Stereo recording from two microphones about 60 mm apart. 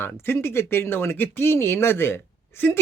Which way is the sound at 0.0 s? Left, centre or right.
Left.